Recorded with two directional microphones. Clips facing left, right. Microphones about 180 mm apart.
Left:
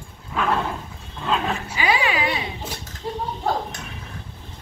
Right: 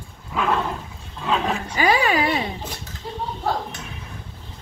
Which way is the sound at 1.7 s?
45° right (ahead or behind).